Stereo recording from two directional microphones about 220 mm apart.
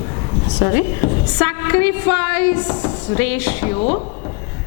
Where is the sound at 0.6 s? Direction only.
20° left (ahead or behind).